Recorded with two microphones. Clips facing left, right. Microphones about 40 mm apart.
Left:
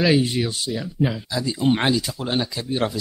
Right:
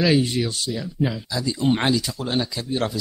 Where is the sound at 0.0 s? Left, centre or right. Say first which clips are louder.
Left 1 dB; centre.